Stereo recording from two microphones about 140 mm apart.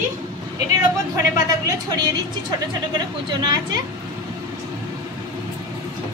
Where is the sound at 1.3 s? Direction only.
25° right (ahead or behind).